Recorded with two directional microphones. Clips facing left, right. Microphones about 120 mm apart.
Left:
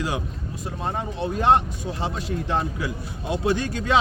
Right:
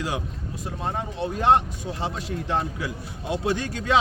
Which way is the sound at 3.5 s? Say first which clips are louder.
Left 2 dB; 35° left (ahead or behind).